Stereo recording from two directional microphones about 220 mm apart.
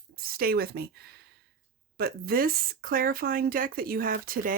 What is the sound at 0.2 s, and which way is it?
Speech, 40° right (ahead or behind).